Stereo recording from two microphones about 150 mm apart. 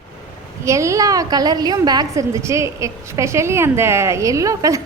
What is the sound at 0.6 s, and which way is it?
A woman's voice, 20° right (ahead or behind).